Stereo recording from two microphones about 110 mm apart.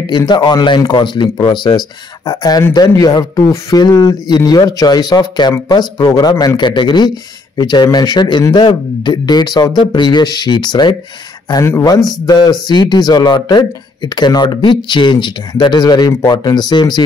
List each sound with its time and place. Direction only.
0.0 s speech: 40° left (ahead or behind)
11.6 s a man's voice: 25° left (ahead or behind)
12.3 s speech: 40° left (ahead or behind)